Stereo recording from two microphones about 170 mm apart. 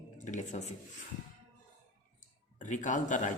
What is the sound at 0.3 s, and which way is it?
Speech, 45° left (ahead or behind).